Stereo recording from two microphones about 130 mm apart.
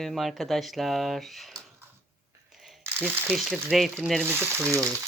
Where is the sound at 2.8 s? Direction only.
15° right (ahead or behind).